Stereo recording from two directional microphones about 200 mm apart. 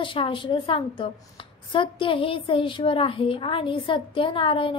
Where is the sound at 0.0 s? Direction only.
25° left (ahead or behind).